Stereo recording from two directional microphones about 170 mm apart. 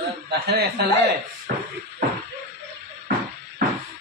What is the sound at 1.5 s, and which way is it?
Music, 60° right (ahead or behind).